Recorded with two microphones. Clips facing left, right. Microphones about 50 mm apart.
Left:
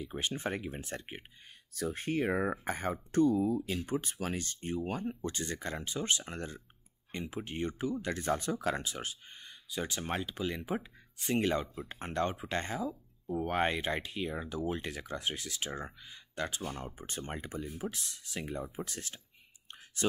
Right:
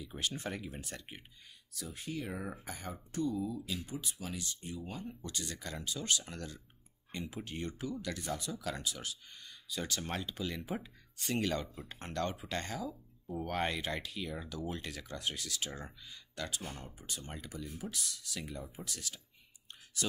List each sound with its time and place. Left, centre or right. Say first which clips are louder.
0.0 s speech: left 3 dB; left
2.0 s speech: left 9 dB; left
5.2 s speech: left 6 dB; left